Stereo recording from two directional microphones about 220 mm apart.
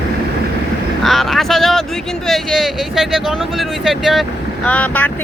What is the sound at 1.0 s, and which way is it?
Vehicle, centre (ahead or behind).